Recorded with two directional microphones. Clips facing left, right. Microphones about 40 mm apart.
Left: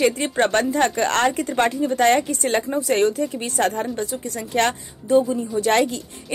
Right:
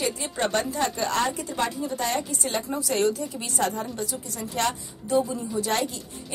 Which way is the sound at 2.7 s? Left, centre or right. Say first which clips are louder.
Left 3 dB; left.